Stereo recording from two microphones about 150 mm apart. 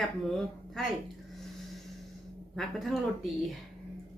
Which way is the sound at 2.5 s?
Centre (ahead or behind).